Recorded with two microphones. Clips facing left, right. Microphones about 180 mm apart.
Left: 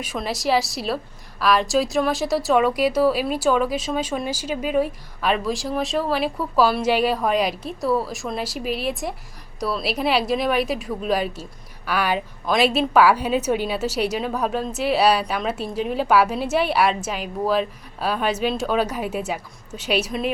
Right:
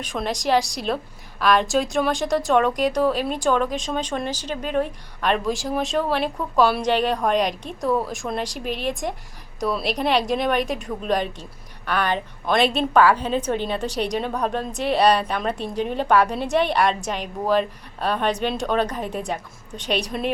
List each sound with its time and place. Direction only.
0.0 s a woman's voice: 5° left (ahead or behind)